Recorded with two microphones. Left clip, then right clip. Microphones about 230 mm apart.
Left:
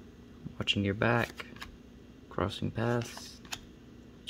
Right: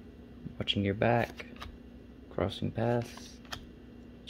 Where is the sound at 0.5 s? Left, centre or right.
Centre.